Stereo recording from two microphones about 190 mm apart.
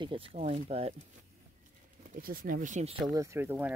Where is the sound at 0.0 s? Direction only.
30° right (ahead or behind).